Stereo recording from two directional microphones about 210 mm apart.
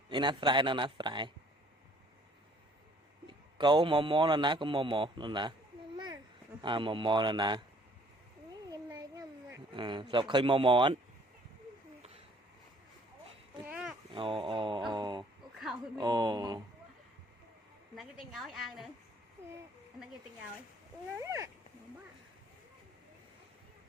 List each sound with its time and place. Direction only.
0.1 s a man's voice: 20° right (ahead or behind)
3.2 s a man's voice: 20° right (ahead or behind)
6.6 s a man's voice: 25° right (ahead or behind)
8.7 s a sound: 20° right (ahead or behind)
13.7 s a sound: 5° right (ahead or behind)
14.1 s a sound: 25° right (ahead or behind)
16.0 s a man's voice: 20° right (ahead or behind)
17.9 s a woman's voice: centre (ahead or behind)
21.2 s speech: 15° right (ahead or behind)